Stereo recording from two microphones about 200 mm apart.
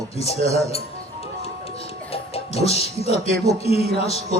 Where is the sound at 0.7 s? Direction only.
30° left (ahead or behind).